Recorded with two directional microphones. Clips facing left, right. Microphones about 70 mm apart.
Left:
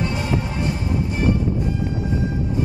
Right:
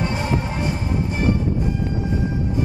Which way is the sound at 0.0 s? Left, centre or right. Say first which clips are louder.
Even; right.